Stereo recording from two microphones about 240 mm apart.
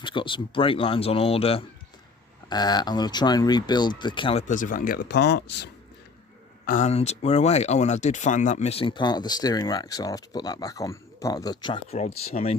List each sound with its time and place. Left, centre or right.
0.0 s speech: centre; by 5.7 s left
6.7 s speech: left